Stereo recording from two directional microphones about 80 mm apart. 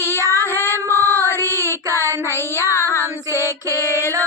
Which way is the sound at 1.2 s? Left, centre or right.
Right.